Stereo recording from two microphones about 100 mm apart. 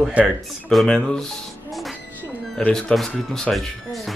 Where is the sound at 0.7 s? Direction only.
5° left (ahead or behind).